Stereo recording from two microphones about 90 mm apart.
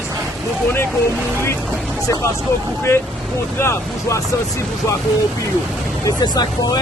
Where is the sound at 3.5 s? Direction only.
30° left (ahead or behind).